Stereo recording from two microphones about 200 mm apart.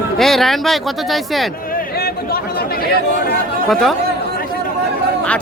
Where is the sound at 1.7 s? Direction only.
50° left (ahead or behind).